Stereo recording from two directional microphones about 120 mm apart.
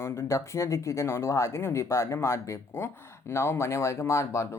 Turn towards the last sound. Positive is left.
turn(degrees=25)  # may be behind; listen again after turning